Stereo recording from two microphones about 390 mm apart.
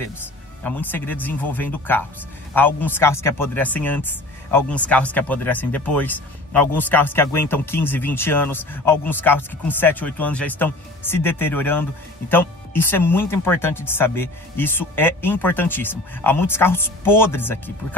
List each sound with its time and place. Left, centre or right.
0.7 s speech: centre